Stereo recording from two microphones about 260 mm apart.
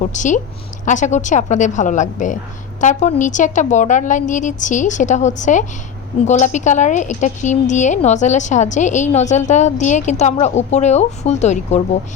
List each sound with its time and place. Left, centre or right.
0.0 s a woman's voice: left